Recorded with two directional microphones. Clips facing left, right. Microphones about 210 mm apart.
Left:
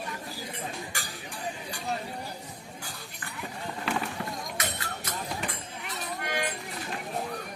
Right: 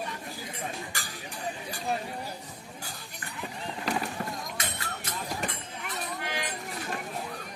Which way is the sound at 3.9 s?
40° right (ahead or behind).